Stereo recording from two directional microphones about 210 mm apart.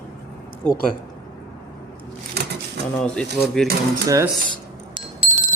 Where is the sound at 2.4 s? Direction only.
50° right (ahead or behind).